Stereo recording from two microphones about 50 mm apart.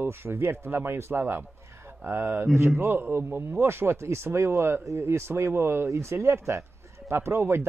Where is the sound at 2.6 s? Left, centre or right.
Right.